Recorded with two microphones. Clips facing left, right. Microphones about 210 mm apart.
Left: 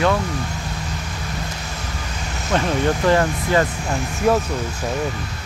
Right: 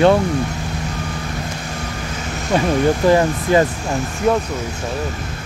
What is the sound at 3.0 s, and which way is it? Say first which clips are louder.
Speech: right 2 dB; 15° right (ahead or behind).